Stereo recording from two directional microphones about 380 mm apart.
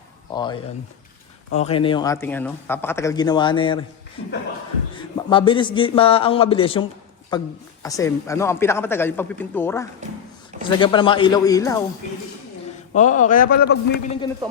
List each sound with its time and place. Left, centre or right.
0.3 s a man's voice: centre
4.9 s a man's voice: centre
10.0 s a sound: centre
10.6 s a man's voice: centre
12.9 s a man's voice: centre